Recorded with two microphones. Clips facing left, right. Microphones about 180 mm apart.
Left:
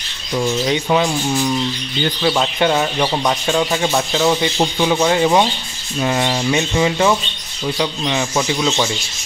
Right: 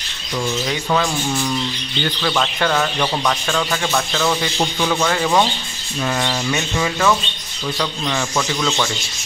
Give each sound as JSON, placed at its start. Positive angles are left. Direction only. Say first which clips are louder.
{"t": 0.7, "sound": "speech", "louder": "left 3 dB", "side_deg": 20}